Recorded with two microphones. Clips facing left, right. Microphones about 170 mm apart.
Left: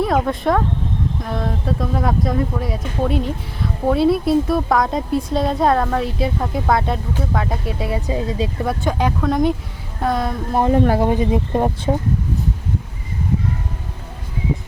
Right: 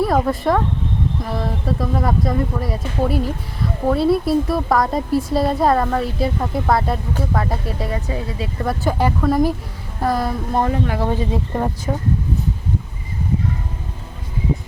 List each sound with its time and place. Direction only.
0.0 s speech: centre (ahead or behind)
7.9 s speech: 15° left (ahead or behind)
8.6 s speech: 5° right (ahead or behind)
10.7 s speech: 30° left (ahead or behind)
11.0 s speech: 15° left (ahead or behind)